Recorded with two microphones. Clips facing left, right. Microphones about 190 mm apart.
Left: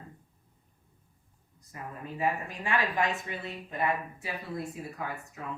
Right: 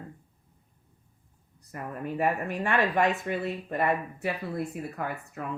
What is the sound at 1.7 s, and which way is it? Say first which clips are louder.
Speech: right 7 dB; 60° right (ahead or behind).